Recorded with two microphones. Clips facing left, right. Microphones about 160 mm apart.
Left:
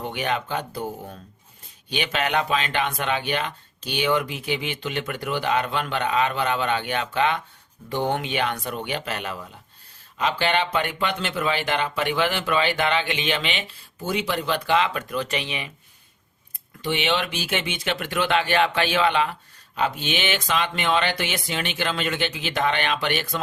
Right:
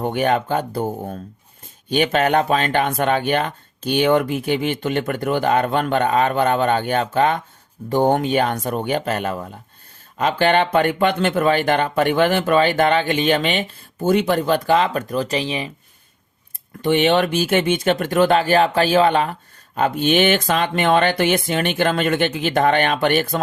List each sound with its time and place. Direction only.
0.0 s speech: 50° right (ahead or behind); by 15.7 s 35° right (ahead or behind)
16.8 s speech: 50° right (ahead or behind)